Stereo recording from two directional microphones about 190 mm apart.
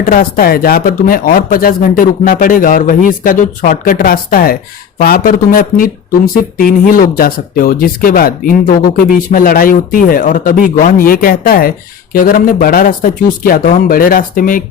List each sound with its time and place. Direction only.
0.0 s speech: 45° left (ahead or behind)